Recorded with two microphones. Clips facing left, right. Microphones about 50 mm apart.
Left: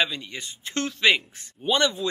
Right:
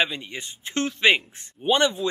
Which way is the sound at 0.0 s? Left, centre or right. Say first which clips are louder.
Right 1 dB; right.